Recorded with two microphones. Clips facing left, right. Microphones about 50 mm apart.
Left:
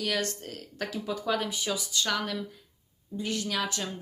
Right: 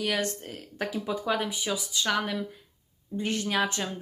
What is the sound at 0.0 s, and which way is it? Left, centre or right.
Speech, centre.